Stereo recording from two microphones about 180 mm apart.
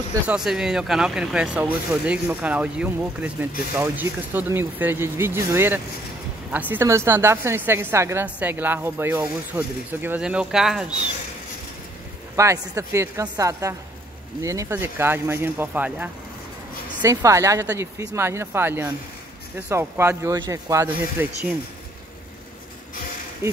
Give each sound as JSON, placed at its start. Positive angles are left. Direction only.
{"t": 0.3, "sound": "speech", "side_deg": -5}
{"t": 12.4, "sound": "speech", "side_deg": -15}